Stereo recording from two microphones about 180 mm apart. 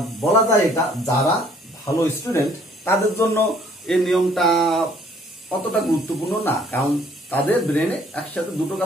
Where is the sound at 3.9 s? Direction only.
Centre (ahead or behind).